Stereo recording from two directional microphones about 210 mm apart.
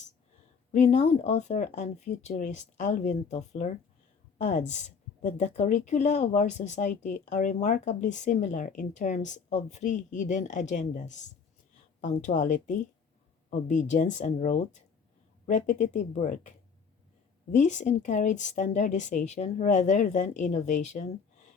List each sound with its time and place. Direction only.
0.7 s a woman's voice: 30° left (ahead or behind)